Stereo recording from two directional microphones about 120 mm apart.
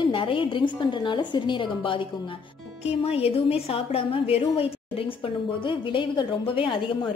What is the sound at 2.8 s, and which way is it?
A woman's voice, 55° left (ahead or behind).